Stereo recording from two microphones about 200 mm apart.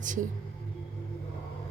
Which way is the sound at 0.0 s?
40° right (ahead or behind).